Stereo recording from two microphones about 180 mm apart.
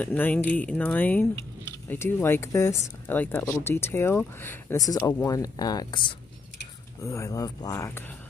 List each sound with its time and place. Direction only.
0.0 s speech: 10° left (ahead or behind)